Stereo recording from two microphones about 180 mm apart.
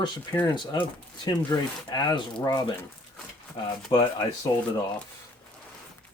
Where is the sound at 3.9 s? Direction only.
20° left (ahead or behind).